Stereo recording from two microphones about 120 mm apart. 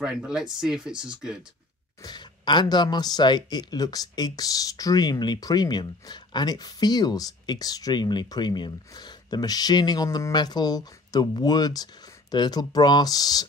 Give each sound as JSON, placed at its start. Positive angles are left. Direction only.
{"t": 0.0, "sound": "speech", "side_deg": -5}
{"t": 2.0, "sound": "speech", "side_deg": 40}